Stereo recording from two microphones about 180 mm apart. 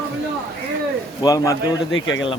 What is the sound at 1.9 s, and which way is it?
Speech, 90° left.